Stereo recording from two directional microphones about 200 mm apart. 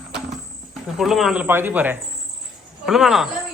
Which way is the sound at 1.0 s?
Centre (ahead or behind).